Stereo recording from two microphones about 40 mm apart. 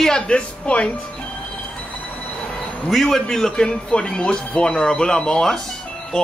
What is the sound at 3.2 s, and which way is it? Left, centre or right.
A man's voice, centre.